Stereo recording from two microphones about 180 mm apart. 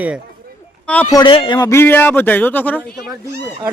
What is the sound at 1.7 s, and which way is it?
Speech, 10° left (ahead or behind).